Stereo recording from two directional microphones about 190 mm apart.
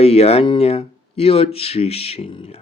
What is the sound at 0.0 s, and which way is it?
Speech, 35° left (ahead or behind).